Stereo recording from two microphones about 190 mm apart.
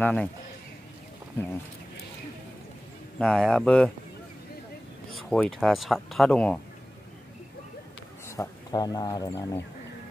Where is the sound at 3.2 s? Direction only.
5° left (ahead or behind).